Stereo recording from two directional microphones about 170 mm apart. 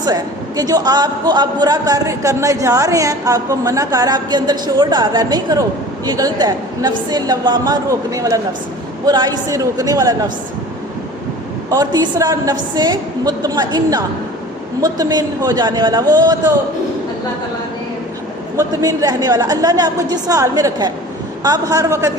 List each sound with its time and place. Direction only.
0.0 s a man's voice: 20° right (ahead or behind)
11.7 s a man's voice: 20° right (ahead or behind)
18.5 s a man's voice: 20° right (ahead or behind)